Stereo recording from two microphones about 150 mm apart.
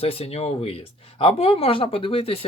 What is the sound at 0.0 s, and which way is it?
Speech, 40° left (ahead or behind).